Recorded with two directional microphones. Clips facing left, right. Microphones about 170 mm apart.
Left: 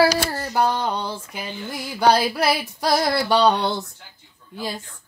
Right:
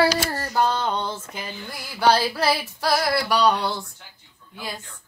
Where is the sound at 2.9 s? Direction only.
25° left (ahead or behind).